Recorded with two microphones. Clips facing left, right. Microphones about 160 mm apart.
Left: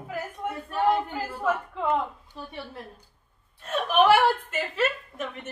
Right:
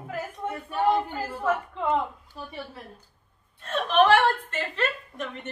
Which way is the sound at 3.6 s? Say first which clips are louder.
Even; 10° left (ahead or behind).